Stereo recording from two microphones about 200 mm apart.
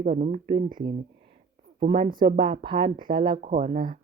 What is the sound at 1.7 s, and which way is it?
A woman's voice, 35° right (ahead or behind).